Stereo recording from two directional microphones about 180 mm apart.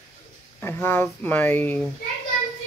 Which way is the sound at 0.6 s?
10° left (ahead or behind).